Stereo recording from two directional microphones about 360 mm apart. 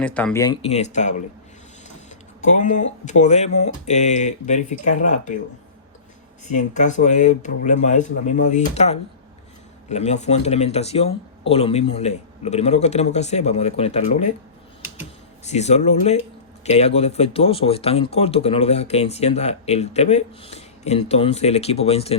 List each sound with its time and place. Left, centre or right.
0.0 s speech: centre; by 5.4 s left
6.5 s speech: centre
15.4 s speech: centre